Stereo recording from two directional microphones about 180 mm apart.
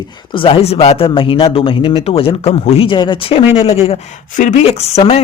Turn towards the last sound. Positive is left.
turn(degrees=35)  # may be behind; listen again after turning